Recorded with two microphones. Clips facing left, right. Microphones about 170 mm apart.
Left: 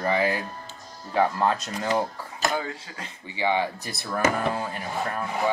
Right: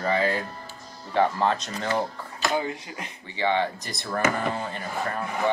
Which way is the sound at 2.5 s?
20° right (ahead or behind).